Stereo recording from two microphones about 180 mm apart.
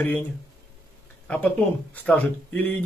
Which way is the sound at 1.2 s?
5° left (ahead or behind).